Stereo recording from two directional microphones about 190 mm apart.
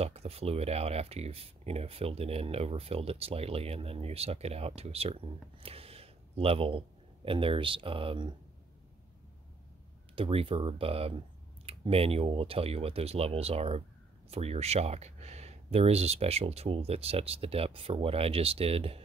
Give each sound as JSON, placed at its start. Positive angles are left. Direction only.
{"t": 0.0, "sound": "speech", "side_deg": -30}
{"t": 10.1, "sound": "speech", "side_deg": -30}